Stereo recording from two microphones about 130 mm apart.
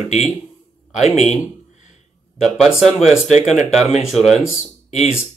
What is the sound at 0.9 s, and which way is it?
Speech, 60° left (ahead or behind).